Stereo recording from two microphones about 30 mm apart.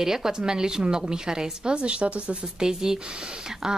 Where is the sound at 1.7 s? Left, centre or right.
Right.